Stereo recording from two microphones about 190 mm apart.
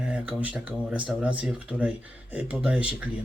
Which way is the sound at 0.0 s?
5° right (ahead or behind).